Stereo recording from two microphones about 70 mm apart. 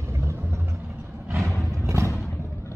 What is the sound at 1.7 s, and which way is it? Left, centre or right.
Music, right.